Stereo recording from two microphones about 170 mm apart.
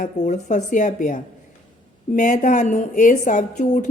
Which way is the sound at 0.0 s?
45° left (ahead or behind).